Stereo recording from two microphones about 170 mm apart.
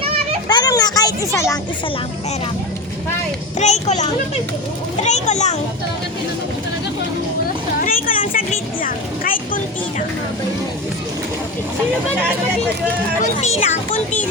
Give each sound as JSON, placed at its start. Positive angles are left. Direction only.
{"t": 0.0, "sound": "children playing", "side_deg": -35}
{"t": 0.4, "sound": "a child's voice", "side_deg": 20}
{"t": 3.6, "sound": "a child's voice", "side_deg": 40}
{"t": 7.8, "sound": "a sound", "side_deg": 55}
{"t": 13.2, "sound": "speech", "side_deg": 40}